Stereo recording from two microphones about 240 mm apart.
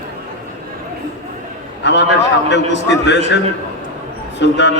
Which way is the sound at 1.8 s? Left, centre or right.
Left.